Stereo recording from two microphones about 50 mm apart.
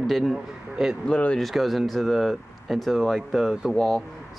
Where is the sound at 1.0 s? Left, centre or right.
Left.